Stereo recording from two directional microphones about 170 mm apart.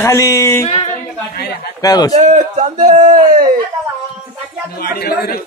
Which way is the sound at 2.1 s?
40° right (ahead or behind).